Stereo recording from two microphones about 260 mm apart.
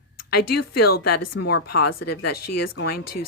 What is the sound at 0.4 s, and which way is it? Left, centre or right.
Speech, left.